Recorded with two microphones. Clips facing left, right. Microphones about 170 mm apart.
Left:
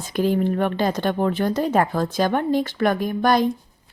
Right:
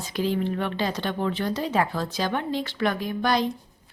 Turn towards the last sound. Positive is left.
turn(degrees=50)  # may be behind; listen again after turning